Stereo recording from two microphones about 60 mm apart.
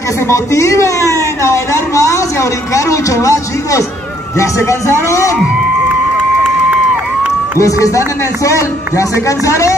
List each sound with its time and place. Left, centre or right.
0.3 s a sound: left
2.7 s a man's voice: left
7.5 s a man's voice: left